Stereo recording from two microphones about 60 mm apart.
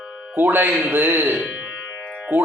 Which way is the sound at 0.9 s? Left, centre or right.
Right.